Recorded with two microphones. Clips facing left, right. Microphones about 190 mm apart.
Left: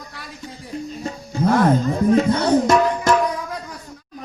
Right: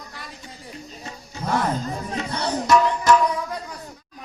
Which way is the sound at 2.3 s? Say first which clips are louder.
Left 4 dB; 50° left (ahead or behind).